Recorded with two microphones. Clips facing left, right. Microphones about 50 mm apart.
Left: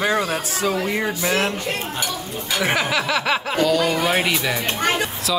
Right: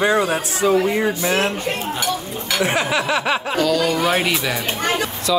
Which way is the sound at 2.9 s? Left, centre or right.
Centre.